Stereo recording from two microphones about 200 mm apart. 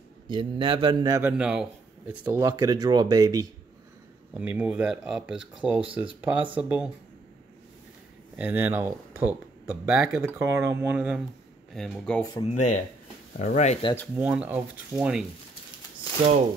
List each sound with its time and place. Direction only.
0.3 s a man's voice: 25° right (ahead or behind); by 2.1 s 5° right (ahead or behind)
2.2 s speech: 20° right (ahead or behind)
4.3 s speech: 5° right (ahead or behind)
8.4 s speech: 10° right (ahead or behind)
11.7 s speech: 5° left (ahead or behind)
12.4 s speech: 35° left (ahead or behind)
14.1 s speech: 5° right (ahead or behind)